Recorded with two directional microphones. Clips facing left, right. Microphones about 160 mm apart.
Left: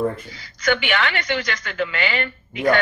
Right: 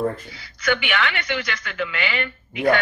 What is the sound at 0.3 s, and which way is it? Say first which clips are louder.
A woman's voice: left 2 dB; 40° left (ahead or behind).